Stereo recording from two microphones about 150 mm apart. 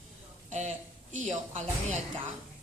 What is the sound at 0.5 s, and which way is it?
A woman's voice, 50° right (ahead or behind).